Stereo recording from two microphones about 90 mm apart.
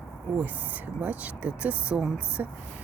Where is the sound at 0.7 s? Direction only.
15° right (ahead or behind).